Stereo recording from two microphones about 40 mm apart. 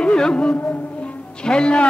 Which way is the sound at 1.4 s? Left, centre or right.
Left.